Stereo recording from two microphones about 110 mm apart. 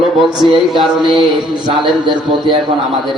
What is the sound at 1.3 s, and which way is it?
A man's voice, 45° right (ahead or behind).